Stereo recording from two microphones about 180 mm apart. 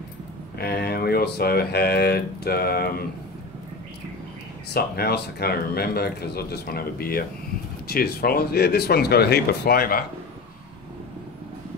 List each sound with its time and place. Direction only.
0.6 s speech: 60° left (ahead or behind)
4.7 s speech: 60° left (ahead or behind)